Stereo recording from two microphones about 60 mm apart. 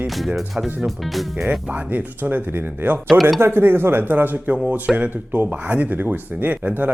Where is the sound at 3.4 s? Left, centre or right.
Right.